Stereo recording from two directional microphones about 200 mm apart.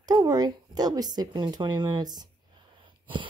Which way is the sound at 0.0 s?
20° right (ahead or behind).